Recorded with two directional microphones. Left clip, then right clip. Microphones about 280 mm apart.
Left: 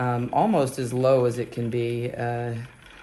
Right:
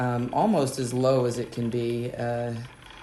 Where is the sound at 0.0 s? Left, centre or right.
Centre.